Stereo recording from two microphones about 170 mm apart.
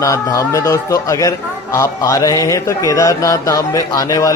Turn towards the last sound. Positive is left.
turn(degrees=20)  # may be behind; listen again after turning